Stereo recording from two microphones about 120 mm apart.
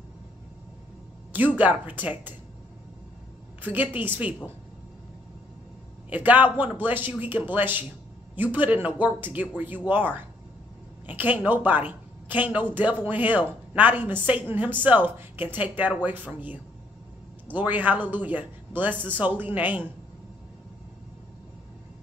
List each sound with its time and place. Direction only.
1.3 s speech: 15° right (ahead or behind)
3.6 s speech: 15° right (ahead or behind)
6.0 s speech: 15° right (ahead or behind)
17.5 s speech: 15° right (ahead or behind)